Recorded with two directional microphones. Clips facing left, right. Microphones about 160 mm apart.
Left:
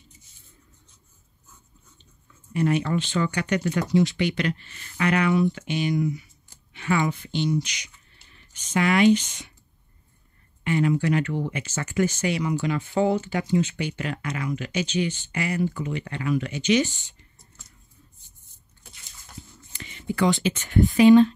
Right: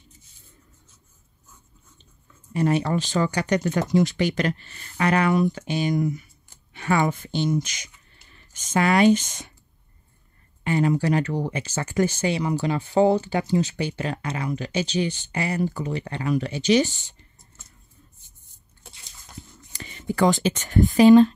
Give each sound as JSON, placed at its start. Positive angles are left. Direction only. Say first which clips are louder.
{"t": 2.5, "sound": "speech", "louder": "right 1 dB", "side_deg": -35}
{"t": 10.6, "sound": "speech", "louder": "right 1 dB", "side_deg": -35}
{"t": 19.7, "sound": "speech", "louder": "right 1 dB", "side_deg": -40}